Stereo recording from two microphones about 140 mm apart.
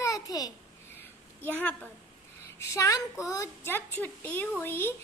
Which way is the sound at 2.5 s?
20° left (ahead or behind).